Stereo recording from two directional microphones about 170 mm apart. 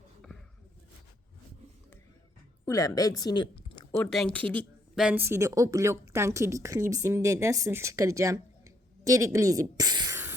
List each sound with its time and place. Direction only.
2.6 s a woman's voice: 20° left (ahead or behind)
3.9 s speech: centre (ahead or behind)
4.9 s a woman's voice: 10° right (ahead or behind); by 10.2 s 25° right (ahead or behind)